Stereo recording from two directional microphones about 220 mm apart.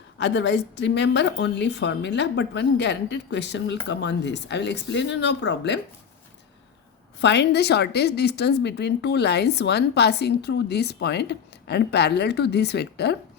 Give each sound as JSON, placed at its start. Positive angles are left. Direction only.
{"t": 0.2, "sound": "a woman's voice", "side_deg": 50}
{"t": 7.2, "sound": "a woman's voice", "side_deg": 50}